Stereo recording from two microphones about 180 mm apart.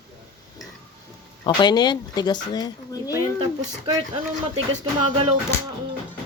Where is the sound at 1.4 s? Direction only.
25° left (ahead or behind).